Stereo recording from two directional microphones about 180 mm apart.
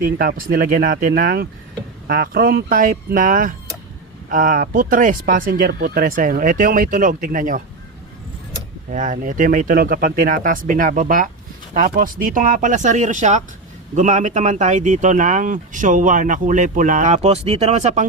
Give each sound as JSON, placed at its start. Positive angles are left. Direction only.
{"t": 0.0, "sound": "speech", "side_deg": -55}
{"t": 8.9, "sound": "speech", "side_deg": -45}